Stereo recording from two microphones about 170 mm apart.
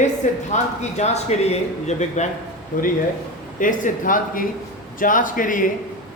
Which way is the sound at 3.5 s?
50° left (ahead or behind).